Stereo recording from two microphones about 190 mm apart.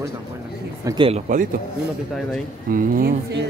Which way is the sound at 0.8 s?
25° right (ahead or behind).